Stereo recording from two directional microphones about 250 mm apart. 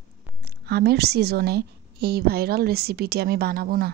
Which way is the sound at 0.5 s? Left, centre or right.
Right.